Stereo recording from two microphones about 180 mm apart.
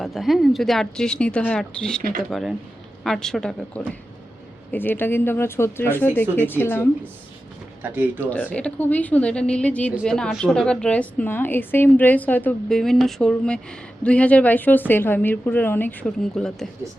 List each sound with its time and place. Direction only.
0.0 s a woman's voice: centre (ahead or behind)
2.0 s speech: 50° right (ahead or behind)
2.3 s a woman's voice: centre (ahead or behind)
4.7 s a woman's voice: 10° left (ahead or behind)
7.8 s speech: 10° right (ahead or behind)
8.2 s a woman's voice: 10° left (ahead or behind)